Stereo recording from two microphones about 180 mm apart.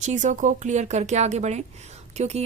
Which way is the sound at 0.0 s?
40° right (ahead or behind).